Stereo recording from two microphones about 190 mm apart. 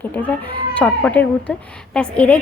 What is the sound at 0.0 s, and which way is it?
Speech, 10° left (ahead or behind).